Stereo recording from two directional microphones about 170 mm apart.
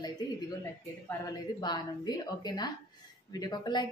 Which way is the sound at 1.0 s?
20° left (ahead or behind).